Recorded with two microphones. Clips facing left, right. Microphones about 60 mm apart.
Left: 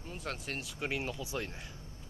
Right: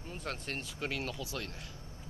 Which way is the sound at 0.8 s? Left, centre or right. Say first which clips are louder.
Left 1 dB; centre.